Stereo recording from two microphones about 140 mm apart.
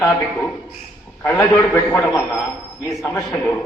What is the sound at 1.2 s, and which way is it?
A man's voice, 15° left (ahead or behind).